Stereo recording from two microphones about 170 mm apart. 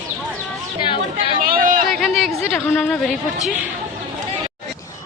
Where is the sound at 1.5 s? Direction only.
55° right (ahead or behind).